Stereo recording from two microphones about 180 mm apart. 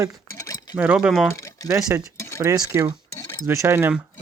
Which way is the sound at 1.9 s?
15° right (ahead or behind).